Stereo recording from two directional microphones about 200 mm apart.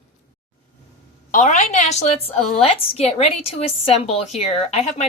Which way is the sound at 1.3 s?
40° left (ahead or behind).